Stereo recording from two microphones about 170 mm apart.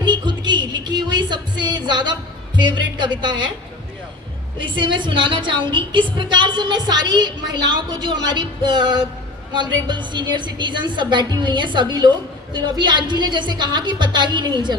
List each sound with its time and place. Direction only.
0.0 s music: 25° right (ahead or behind)
2.6 s a woman's voice: 25° right (ahead or behind)
4.5 s a woman's voice: 30° right (ahead or behind)